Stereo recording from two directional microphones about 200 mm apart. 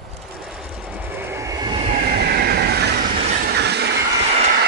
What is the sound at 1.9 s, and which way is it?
Train, 50° right (ahead or behind).